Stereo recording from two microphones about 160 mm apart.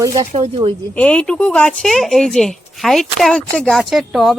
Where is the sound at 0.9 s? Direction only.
5° left (ahead or behind).